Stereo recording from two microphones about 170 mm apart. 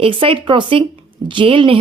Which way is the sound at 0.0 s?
30° right (ahead or behind).